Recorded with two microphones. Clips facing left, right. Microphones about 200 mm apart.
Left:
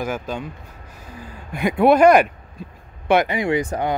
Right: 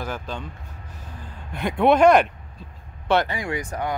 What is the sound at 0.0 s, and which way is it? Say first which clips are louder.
Speech: left 5 dB; 10° left (ahead or behind).